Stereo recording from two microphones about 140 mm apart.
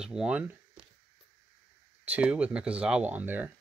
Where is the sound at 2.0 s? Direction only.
10° right (ahead or behind).